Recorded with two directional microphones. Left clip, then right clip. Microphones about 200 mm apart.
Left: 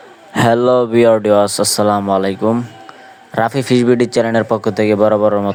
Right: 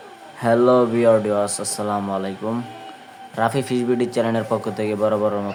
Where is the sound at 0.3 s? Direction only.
45° left (ahead or behind).